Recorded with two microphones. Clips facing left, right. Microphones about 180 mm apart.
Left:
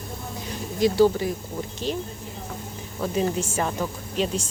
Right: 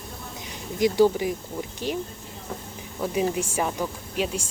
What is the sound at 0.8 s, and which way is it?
A woman's voice, 15° right (ahead or behind).